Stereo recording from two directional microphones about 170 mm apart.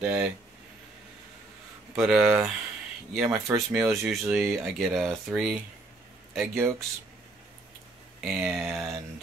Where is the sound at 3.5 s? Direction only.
5° right (ahead or behind).